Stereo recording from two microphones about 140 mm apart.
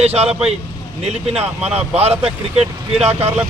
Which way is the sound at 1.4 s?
50° right (ahead or behind).